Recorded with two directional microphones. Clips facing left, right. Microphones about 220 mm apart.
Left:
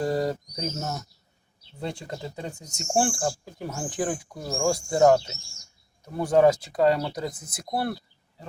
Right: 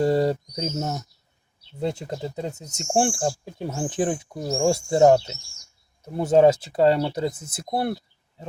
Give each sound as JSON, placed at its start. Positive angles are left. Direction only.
{"t": 0.0, "sound": "speech", "side_deg": -25}